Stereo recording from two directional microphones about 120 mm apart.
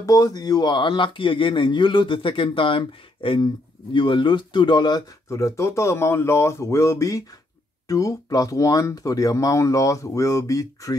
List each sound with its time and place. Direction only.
0.0 s speech: 30° left (ahead or behind)
5.3 s speech: 25° left (ahead or behind)